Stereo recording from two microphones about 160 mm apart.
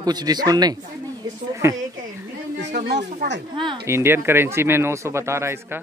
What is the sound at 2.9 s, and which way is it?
Speech, 90° right.